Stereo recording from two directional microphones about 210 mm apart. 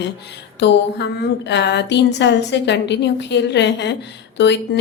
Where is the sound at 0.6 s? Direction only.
55° left (ahead or behind).